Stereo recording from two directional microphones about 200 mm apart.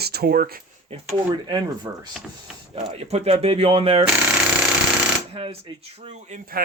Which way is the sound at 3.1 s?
30° right (ahead or behind).